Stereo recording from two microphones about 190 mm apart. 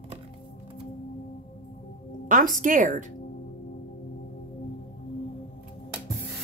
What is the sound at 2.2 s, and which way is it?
Speech, 45° right (ahead or behind).